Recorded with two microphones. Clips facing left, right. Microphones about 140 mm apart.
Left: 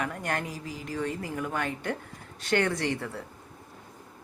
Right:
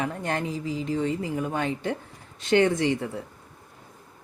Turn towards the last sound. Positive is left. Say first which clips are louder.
# right 6 dB
turn(degrees=-20)  # may be behind; listen again after turning